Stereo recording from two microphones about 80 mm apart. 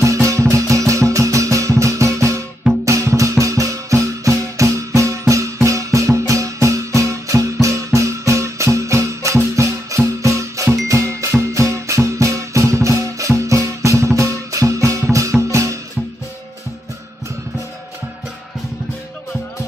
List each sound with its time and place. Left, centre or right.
0.0 s music: right